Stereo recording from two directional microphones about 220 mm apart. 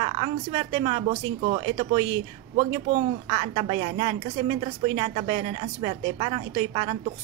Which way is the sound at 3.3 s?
25° right (ahead or behind).